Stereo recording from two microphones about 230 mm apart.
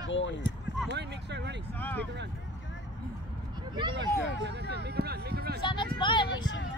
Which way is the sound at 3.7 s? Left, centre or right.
Centre.